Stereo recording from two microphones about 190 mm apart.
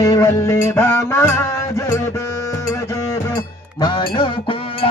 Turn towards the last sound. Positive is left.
turn(degrees=25)  # may be behind; listen again after turning